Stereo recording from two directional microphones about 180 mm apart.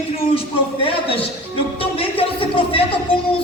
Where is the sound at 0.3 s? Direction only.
30° left (ahead or behind).